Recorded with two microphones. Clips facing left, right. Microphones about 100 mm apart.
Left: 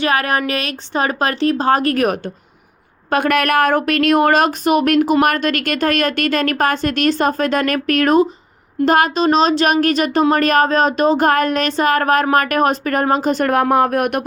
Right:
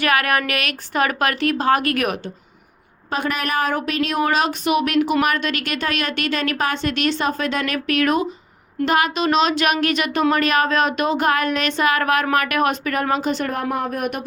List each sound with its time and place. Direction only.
0.0 s a woman's voice: 30° left (ahead or behind)
3.1 s speech: 55° left (ahead or behind)
13.5 s speech: 75° left (ahead or behind)